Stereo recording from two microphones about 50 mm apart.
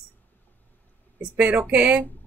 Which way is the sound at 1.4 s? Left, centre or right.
Right.